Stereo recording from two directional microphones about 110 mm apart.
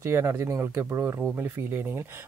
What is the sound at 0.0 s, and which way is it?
Speech, 25° right (ahead or behind).